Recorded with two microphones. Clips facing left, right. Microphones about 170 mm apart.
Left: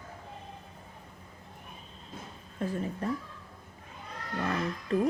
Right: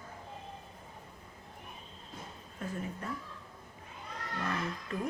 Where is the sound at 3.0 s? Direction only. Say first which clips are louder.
Left 8 dB; 35° left (ahead or behind).